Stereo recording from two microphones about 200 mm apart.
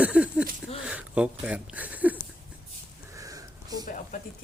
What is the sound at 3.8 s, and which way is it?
Speech, 40° left (ahead or behind).